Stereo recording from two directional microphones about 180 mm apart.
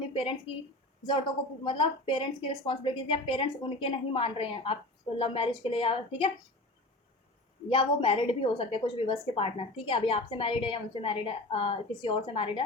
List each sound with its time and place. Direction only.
0.1 s a sound: 30° left (ahead or behind)
1.6 s a woman's voice: 30° left (ahead or behind)
7.7 s a woman's voice: 30° left (ahead or behind)